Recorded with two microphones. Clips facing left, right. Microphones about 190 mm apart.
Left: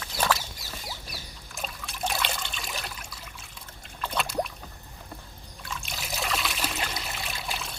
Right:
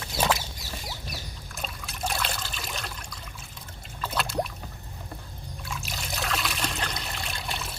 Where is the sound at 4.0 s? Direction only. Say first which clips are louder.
Even; centre (ahead or behind).